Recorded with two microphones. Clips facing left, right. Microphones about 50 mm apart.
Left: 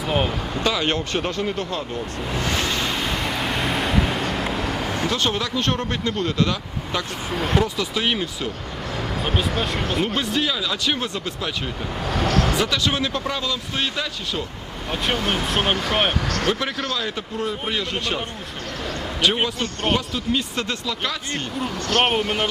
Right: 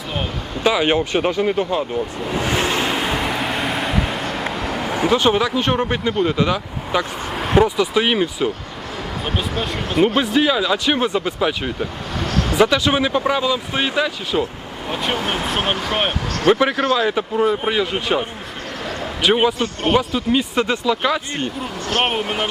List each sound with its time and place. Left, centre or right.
0.6 s speech: centre
2.2 s vehicle: centre
2.8 s vehicle: centre
4.5 s speech: centre
9.2 s speech: centre
12.1 s vehicle: centre
12.5 s speech: centre
14.8 s speech: centre
16.6 s speech: right
18.9 s a sound: centre
19.4 s speech: centre
22.0 s speech: centre